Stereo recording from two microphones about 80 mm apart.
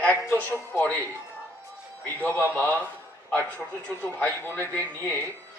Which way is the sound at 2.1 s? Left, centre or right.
Centre.